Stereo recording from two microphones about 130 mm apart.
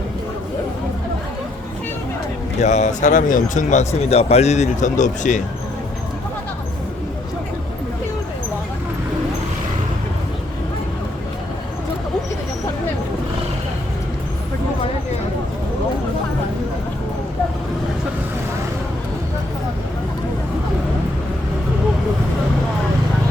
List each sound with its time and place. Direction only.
2.6 s speech: 60° left (ahead or behind)